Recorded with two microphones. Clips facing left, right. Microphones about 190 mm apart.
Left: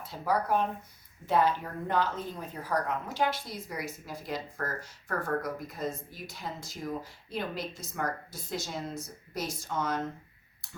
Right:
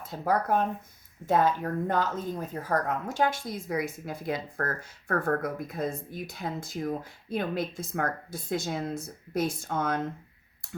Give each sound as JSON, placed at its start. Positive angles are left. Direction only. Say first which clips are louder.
{"t": 0.0, "sound": "a woman's voice", "louder": "right 2 dB", "side_deg": -50}